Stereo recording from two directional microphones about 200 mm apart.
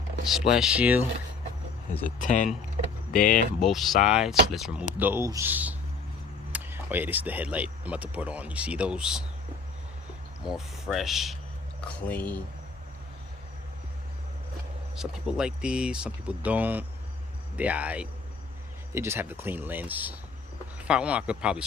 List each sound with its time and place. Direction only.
0.5 s speech: 5° right (ahead or behind)
2.1 s speech: 40° left (ahead or behind)
3.6 s speech: centre (ahead or behind)
10.4 s speech: centre (ahead or behind)
14.9 s speech: 5° right (ahead or behind)